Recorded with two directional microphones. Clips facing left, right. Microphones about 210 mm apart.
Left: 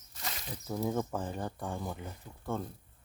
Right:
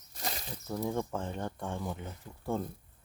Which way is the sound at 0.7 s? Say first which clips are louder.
Left 1 dB; 5° left (ahead or behind).